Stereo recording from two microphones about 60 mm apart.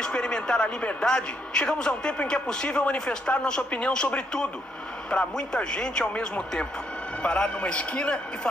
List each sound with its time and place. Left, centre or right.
0.0 s a man's voice: centre